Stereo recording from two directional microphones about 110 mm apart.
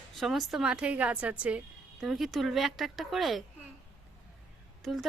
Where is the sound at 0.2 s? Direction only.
Centre (ahead or behind).